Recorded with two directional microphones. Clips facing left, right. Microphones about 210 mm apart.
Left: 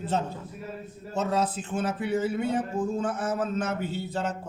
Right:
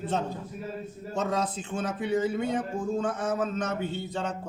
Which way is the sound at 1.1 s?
5° left (ahead or behind).